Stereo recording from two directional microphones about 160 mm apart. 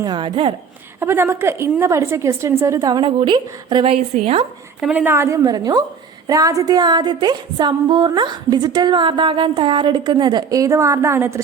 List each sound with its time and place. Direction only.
0.0 s music: 25° right (ahead or behind)
0.9 s a woman's voice: 15° right (ahead or behind)
2.7 s a woman's voice: 25° right (ahead or behind)
4.8 s a woman's voice: 5° right (ahead or behind); by 5.8 s 25° right (ahead or behind)
6.2 s music: 20° right (ahead or behind)